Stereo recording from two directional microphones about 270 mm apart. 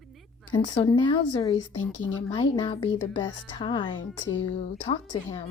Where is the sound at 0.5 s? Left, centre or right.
Centre.